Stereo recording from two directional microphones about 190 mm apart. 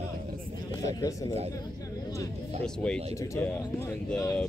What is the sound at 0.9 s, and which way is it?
Speech, 15° left (ahead or behind).